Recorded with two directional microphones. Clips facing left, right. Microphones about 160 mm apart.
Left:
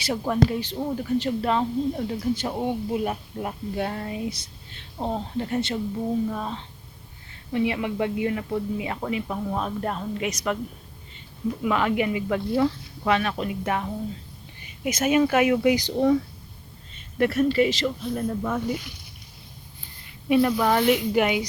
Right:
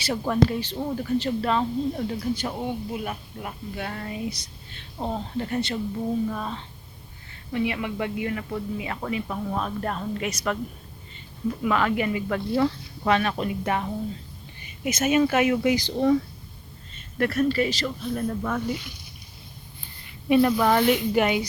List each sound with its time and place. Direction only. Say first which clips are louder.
0.0 s speech: even; 15° left (ahead or behind)
11.6 s speech: left 1 dB; 15° left (ahead or behind)
13.1 s speech: right 1 dB; centre (ahead or behind)
14.8 s speech: left 1 dB; 10° left (ahead or behind)
17.2 s speech: left 2 dB; 20° left (ahead or behind)
20.3 s speech: right 1 dB; centre (ahead or behind)